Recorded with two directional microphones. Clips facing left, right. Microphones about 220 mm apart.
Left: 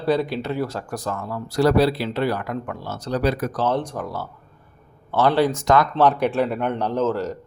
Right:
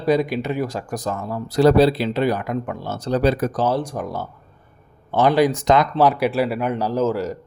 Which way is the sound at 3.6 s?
10° right (ahead or behind).